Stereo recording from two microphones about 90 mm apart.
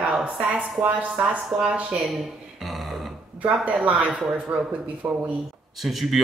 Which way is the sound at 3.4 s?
15° right (ahead or behind).